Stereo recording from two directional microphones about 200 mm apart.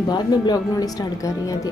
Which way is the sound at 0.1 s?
20° left (ahead or behind).